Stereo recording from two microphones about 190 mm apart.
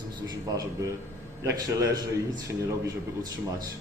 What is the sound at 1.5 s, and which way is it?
A man's voice, 20° right (ahead or behind).